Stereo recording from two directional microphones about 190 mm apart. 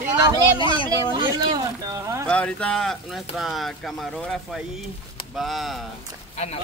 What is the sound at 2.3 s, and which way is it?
Speech, 5° left (ahead or behind).